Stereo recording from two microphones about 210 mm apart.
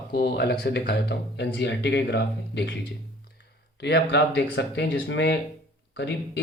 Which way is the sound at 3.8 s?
55° left (ahead or behind).